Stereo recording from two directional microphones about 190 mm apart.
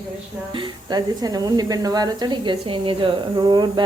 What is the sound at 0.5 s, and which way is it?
A woman's voice, 20° right (ahead or behind).